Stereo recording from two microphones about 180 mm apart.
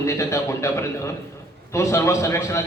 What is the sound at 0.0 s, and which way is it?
A man's voice, 15° left (ahead or behind).